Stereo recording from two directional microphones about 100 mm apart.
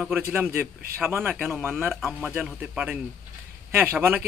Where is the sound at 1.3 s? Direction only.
5° right (ahead or behind).